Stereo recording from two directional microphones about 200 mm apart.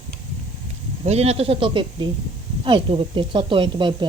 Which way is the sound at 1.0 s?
30° right (ahead or behind).